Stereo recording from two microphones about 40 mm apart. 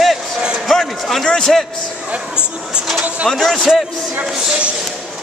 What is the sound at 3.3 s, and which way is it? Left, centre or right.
Speech, centre.